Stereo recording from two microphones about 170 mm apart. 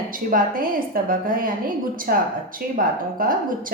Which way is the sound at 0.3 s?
55° right (ahead or behind).